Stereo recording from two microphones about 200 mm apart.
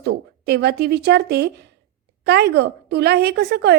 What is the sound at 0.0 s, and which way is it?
A woman's voice, 55° right (ahead or behind).